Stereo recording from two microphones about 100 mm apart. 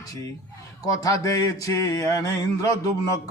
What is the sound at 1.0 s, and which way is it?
Speech, 35° left (ahead or behind).